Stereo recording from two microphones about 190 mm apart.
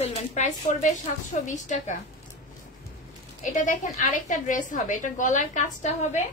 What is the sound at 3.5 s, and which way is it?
A woman's voice, 40° left (ahead or behind).